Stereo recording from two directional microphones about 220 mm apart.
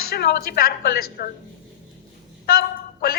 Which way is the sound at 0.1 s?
45° left (ahead or behind).